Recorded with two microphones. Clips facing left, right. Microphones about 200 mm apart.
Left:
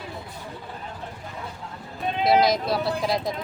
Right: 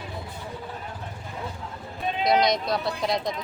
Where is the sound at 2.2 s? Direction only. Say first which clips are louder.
Left 2 dB; 5° left (ahead or behind).